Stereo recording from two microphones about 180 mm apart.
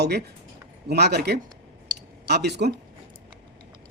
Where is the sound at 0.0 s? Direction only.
65° right (ahead or behind).